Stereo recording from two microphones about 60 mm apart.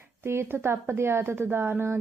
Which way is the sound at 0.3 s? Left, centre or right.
Right.